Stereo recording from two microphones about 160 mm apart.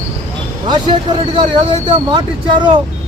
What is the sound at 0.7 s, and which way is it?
Speech, 30° right (ahead or behind).